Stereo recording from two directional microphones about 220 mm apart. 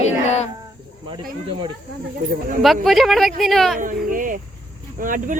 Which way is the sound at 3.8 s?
40° right (ahead or behind).